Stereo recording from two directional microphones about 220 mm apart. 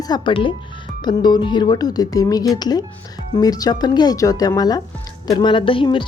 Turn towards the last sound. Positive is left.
turn(degrees=20)  # may be behind; listen again after turning